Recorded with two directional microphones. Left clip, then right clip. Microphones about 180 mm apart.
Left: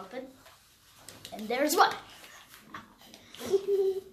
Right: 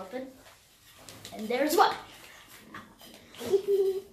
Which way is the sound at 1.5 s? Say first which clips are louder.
Right 1 dB; 55° left (ahead or behind).